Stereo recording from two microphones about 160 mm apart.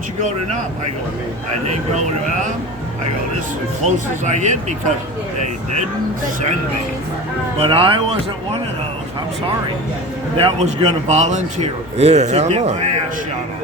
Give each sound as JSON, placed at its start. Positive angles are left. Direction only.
{"t": 3.8, "sound": "a man's voice", "side_deg": -50}
{"t": 7.6, "sound": "speech", "side_deg": -35}
{"t": 10.3, "sound": "a man's voice", "side_deg": -35}